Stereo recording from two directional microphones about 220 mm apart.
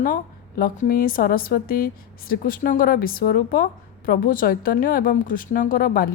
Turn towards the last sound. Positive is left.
turn(degrees=40)  # may be behind; listen again after turning